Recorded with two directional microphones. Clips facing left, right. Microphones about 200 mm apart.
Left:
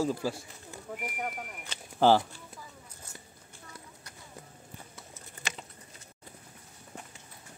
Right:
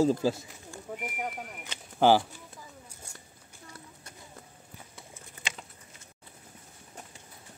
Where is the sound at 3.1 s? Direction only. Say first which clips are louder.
Left 2 dB; 15° right (ahead or behind).